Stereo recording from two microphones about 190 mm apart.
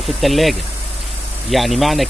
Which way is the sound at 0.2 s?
Centre (ahead or behind).